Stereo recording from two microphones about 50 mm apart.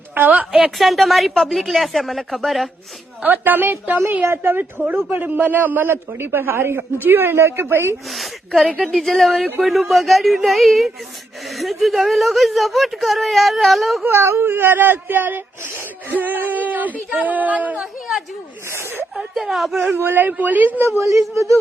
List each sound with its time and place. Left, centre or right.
0.1 s a woman's voice: right
0.8 s speech: centre
3.2 s a man's voice: right
5.1 s a man's voice: right
8.1 s speech: centre
14.1 s a man's voice: right
18.7 s a man's voice: right
19.3 s speech: centre
20.0 s a man's voice: right
21.0 s speech: right